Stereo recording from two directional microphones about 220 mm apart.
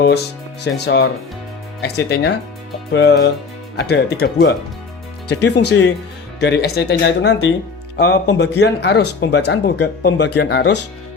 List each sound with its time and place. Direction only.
0.6 s speech: 50° left (ahead or behind)